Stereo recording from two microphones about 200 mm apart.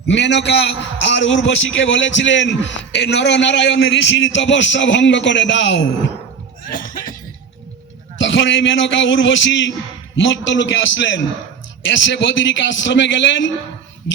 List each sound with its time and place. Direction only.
0.1 s a man's voice: 65° left (ahead or behind)
8.2 s a man's voice: 65° left (ahead or behind)